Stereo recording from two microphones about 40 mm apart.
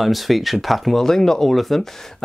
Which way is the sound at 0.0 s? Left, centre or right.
Centre.